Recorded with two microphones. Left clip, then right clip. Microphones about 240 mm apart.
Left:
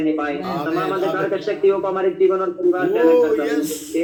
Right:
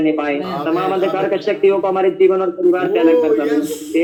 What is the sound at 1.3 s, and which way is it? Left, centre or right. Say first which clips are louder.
Speech: right 3 dB; right.